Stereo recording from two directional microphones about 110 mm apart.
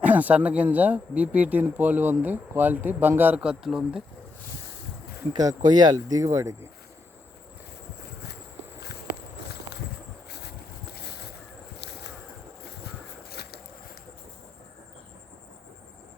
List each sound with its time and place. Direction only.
0.0 s speech: 15° right (ahead or behind)
5.3 s speech: 35° right (ahead or behind)